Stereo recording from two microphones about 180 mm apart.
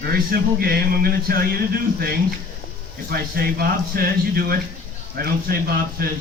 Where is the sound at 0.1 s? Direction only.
55° right (ahead or behind).